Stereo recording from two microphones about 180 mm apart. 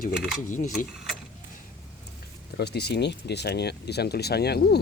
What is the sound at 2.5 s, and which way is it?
Speech, 65° left (ahead or behind).